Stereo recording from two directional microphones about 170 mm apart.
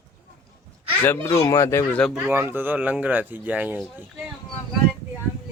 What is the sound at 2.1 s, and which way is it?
Speech, 10° right (ahead or behind).